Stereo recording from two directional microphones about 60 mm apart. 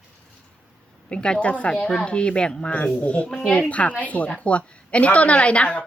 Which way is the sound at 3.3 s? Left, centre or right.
Centre.